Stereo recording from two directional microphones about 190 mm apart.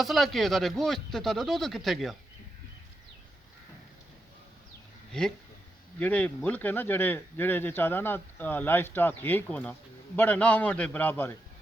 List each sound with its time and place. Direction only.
0.0 s speech: centre (ahead or behind)
6.0 s speech: 10° left (ahead or behind)